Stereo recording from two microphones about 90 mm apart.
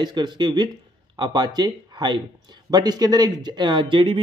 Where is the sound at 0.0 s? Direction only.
55° right (ahead or behind).